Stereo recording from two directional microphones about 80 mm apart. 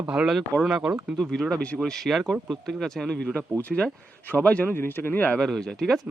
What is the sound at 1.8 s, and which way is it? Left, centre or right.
Speech, centre.